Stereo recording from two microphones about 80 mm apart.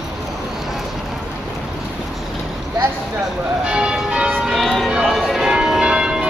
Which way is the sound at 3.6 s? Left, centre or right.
Centre.